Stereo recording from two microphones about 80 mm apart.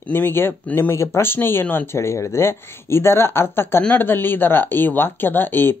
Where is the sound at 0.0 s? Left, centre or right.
Left.